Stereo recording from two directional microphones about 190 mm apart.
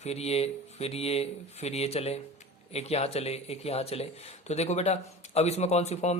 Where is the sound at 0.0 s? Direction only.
35° left (ahead or behind).